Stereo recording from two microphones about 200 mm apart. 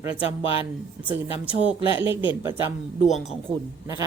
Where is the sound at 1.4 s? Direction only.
5° right (ahead or behind).